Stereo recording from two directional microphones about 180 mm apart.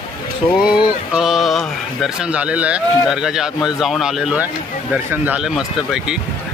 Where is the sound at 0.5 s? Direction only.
5° right (ahead or behind).